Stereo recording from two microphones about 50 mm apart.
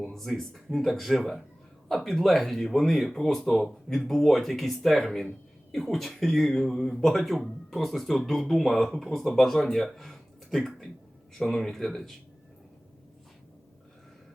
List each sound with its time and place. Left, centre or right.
0.0 s speech: centre